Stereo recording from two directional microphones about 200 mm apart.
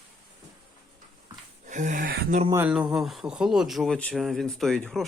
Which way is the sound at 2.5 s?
10° right (ahead or behind).